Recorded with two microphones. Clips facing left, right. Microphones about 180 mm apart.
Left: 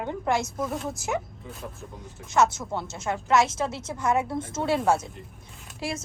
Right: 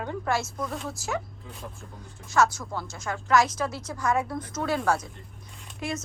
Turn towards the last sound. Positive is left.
turn(degrees=30)  # may be behind; listen again after turning